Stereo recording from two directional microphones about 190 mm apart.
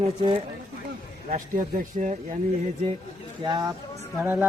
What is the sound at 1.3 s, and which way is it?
Speech, 45° right (ahead or behind).